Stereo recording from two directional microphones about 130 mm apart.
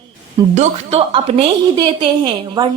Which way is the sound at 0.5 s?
60° right (ahead or behind).